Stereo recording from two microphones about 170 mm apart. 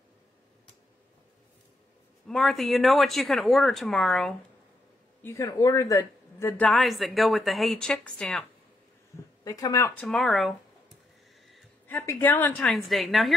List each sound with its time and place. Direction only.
2.2 s a man's voice: centre (ahead or behind)
5.2 s a man's voice: 20° left (ahead or behind)
9.4 s speech: 20° left (ahead or behind)
10.0 s a man's voice: centre (ahead or behind)
11.9 s a man's voice: 10° left (ahead or behind)